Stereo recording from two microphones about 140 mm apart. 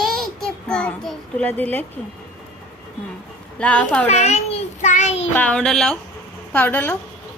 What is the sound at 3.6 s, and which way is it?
Speech, 10° left (ahead or behind).